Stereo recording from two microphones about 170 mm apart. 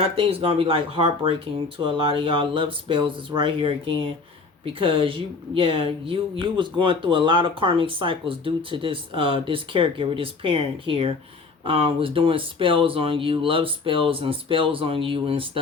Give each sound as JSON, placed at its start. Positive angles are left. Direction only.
{"t": 0.0, "sound": "a woman's voice", "side_deg": -35}